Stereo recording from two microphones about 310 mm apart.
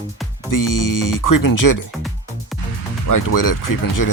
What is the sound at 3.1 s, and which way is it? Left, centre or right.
Speech, left.